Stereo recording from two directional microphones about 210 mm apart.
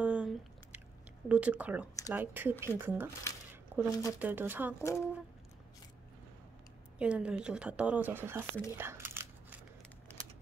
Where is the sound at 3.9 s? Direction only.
15° left (ahead or behind).